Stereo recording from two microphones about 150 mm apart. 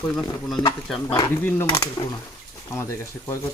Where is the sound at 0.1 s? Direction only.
5° left (ahead or behind).